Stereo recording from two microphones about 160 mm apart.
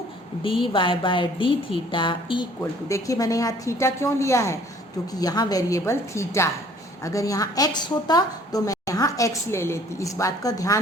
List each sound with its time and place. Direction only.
0.4 s a woman's voice: 35° left (ahead or behind)
2.6 s a woman's voice: 20° left (ahead or behind)